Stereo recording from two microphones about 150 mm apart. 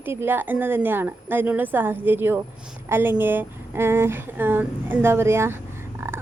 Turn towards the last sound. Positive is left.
turn(degrees=-15)  # may be behind; listen again after turning